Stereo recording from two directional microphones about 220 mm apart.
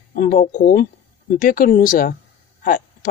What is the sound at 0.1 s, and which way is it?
Speech, 40° left (ahead or behind).